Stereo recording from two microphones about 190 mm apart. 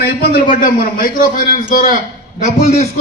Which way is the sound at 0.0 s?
50° left (ahead or behind).